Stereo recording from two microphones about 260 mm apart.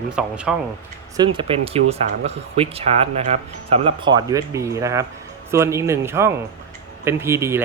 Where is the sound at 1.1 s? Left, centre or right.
Centre.